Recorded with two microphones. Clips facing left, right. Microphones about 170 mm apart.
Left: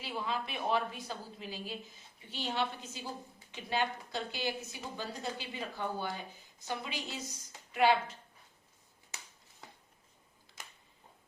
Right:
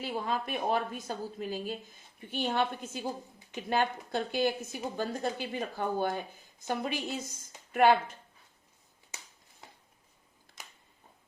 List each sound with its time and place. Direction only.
0.0 s a woman's voice: 45° right (ahead or behind)